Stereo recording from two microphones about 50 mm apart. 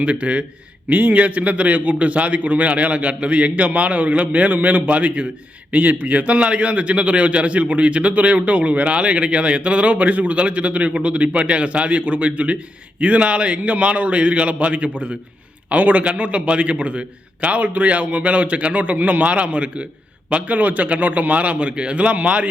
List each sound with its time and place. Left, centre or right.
0.0 s a man's voice: right